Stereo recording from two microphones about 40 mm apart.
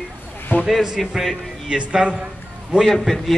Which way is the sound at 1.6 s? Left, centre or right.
Centre.